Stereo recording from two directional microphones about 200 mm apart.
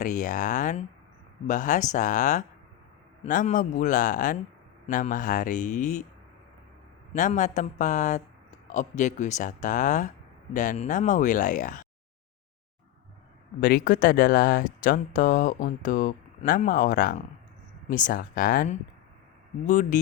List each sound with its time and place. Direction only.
0.0 s speech: 40° left (ahead or behind)
7.1 s speech: 40° left (ahead or behind)
13.6 s speech: 45° left (ahead or behind)